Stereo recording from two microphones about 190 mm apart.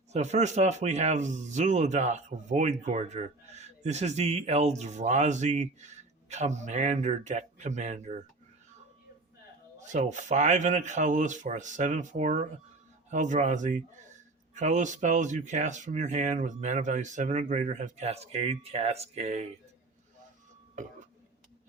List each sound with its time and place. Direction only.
0.1 s speech: 35° right (ahead or behind)
9.9 s speech: 40° right (ahead or behind)